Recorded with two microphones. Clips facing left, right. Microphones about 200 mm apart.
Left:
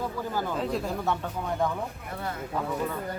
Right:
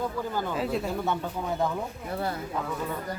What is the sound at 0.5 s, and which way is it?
Speech, 5° right (ahead or behind).